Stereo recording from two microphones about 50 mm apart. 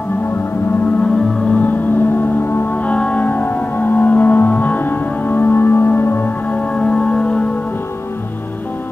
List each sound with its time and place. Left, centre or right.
1.6 s music: left
2.8 s music: left
3.3 s music: left
6.5 s music: left